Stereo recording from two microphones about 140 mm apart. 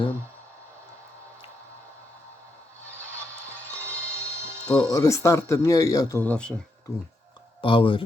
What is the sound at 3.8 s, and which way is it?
Music, 20° right (ahead or behind).